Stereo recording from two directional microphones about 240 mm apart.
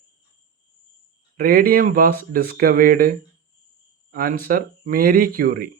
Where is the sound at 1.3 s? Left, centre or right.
Right.